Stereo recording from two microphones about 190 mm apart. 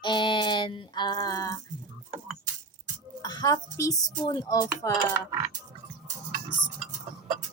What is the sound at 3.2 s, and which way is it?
Speech, 20° left (ahead or behind).